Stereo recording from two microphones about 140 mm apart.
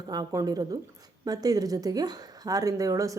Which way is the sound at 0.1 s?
25° right (ahead or behind).